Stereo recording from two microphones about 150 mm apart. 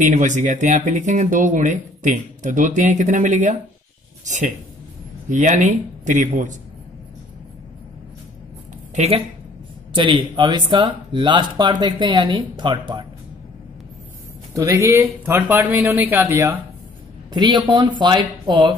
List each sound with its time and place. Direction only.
0.0 s speech: 55° right (ahead or behind)
5.3 s speech: 55° right (ahead or behind)
8.9 s speech: 45° right (ahead or behind)
9.9 s speech: 35° right (ahead or behind)
14.5 s speech: 20° right (ahead or behind)
17.3 s speech: 30° right (ahead or behind)